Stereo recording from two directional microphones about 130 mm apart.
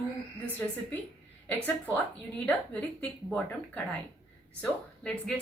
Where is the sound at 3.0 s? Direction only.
5° left (ahead or behind).